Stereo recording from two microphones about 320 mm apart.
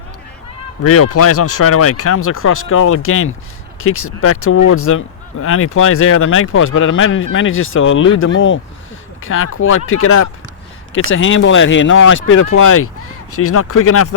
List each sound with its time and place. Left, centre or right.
0.9 s speech: left